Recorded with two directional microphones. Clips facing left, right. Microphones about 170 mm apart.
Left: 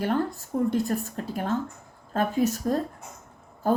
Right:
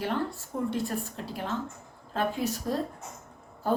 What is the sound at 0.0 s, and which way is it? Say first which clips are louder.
A woman's voice: left 5 dB; 45° left (ahead or behind).